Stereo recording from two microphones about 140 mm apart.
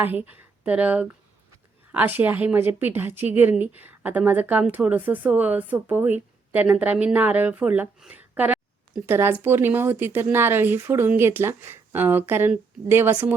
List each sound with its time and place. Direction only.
0.0 s speech: 15° right (ahead or behind)